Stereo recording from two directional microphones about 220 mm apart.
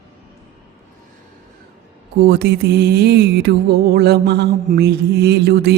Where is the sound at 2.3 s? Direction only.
50° right (ahead or behind).